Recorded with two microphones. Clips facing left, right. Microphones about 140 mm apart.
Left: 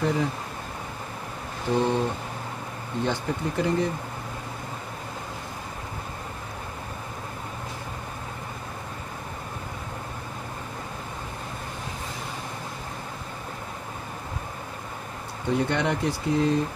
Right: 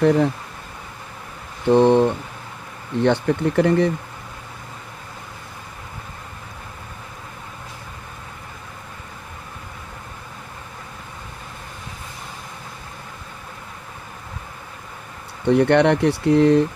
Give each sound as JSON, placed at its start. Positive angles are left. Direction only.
{"t": 0.0, "sound": "speech", "side_deg": -65}
{"t": 1.7, "sound": "speech", "side_deg": -65}
{"t": 15.4, "sound": "speech", "side_deg": -65}